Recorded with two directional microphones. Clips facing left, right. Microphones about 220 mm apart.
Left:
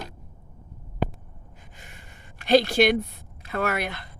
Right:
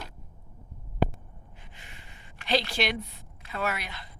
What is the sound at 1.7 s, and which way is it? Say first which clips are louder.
Speech: left 4 dB; 45° left (ahead or behind).